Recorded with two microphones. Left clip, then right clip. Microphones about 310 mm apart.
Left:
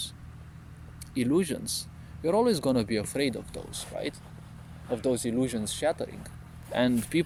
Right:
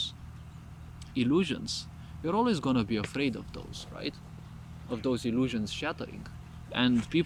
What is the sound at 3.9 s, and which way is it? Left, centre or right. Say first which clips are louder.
Speech: left 4 dB; left.